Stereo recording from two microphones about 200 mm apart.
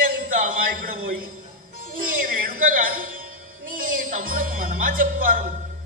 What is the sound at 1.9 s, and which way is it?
Music, 45° right (ahead or behind).